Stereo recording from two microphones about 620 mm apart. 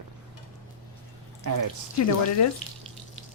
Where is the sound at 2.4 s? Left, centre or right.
Left.